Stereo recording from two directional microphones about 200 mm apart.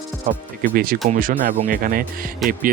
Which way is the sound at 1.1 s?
45° right (ahead or behind).